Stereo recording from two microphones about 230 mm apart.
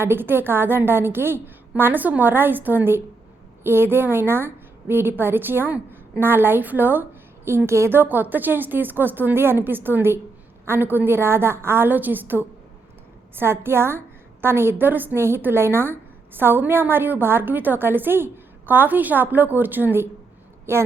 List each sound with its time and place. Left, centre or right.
0.0 s a woman's voice: centre